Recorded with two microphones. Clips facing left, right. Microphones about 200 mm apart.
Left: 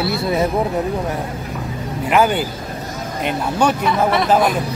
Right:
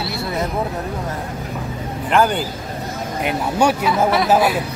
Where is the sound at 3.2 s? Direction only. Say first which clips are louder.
Even; 10° right (ahead or behind).